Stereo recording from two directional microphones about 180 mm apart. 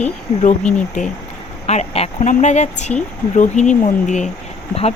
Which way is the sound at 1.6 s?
35° left (ahead or behind).